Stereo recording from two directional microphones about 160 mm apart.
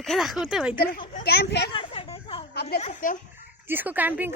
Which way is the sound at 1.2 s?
90° left.